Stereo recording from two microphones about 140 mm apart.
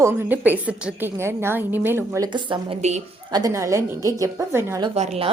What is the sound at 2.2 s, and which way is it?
A woman's voice, 35° right (ahead or behind).